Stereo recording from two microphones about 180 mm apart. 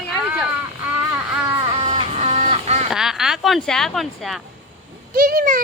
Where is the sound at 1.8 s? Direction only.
30° right (ahead or behind).